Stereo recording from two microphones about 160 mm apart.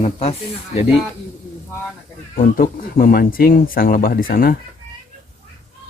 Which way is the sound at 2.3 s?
60° left (ahead or behind).